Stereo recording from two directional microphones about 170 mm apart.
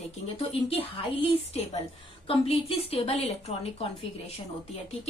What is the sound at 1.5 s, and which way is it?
A woman's voice, 35° left (ahead or behind).